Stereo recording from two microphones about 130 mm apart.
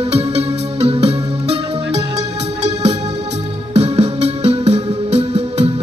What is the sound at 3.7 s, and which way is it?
Music, 55° right (ahead or behind).